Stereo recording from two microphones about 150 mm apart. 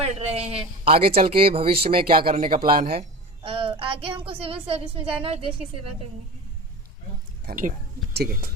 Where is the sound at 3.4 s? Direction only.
35° right (ahead or behind).